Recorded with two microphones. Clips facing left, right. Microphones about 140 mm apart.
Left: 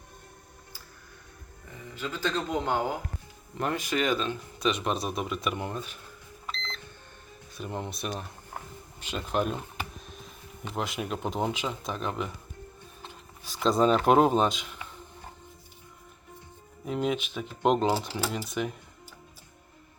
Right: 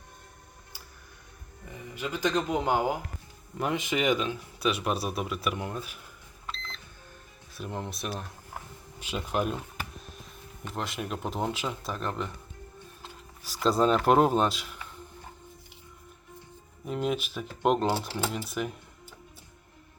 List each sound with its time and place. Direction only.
2.0 s a man's voice: 10° right (ahead or behind)
3.8 s a man's voice: 20° right (ahead or behind)
7.5 s speech: centre (ahead or behind)
13.0 s music: 10° right (ahead or behind)
13.7 s speech: centre (ahead or behind)
16.8 s speech: centre (ahead or behind)